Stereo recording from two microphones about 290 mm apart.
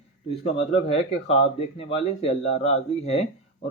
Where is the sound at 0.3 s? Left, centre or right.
Centre.